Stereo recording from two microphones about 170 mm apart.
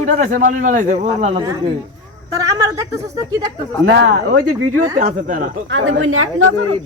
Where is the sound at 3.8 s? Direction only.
90° right.